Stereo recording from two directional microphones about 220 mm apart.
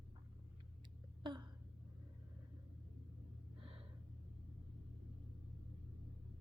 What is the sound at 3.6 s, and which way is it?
Gasp, 25° right (ahead or behind).